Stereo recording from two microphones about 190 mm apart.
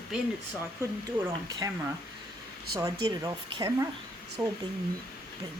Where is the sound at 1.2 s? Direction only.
15° right (ahead or behind).